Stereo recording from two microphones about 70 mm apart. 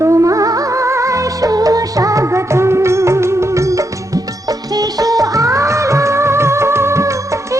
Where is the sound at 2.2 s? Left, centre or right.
Right.